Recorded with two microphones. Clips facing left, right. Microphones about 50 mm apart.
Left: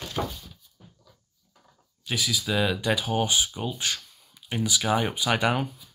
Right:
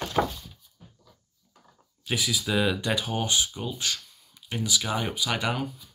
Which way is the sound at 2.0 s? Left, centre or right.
Centre.